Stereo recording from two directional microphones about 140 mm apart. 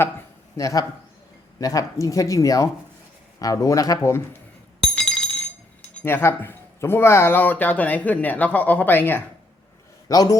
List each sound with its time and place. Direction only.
0.5 s speech: 25° left (ahead or behind)
4.9 s glass: 5° left (ahead or behind)
5.8 s speech: 10° left (ahead or behind)
10.1 s speech: 25° left (ahead or behind)